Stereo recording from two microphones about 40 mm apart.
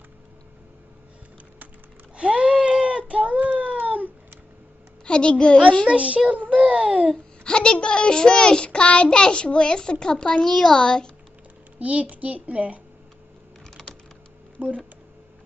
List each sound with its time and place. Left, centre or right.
2.1 s a sound: right
5.0 s a child's voice: left
5.9 s a child's voice: right
7.4 s a child's voice: left
11.8 s speech: right
13.7 s typing: centre
14.6 s speech: right